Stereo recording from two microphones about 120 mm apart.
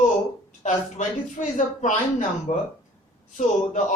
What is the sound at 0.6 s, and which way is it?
Speech, 90° left.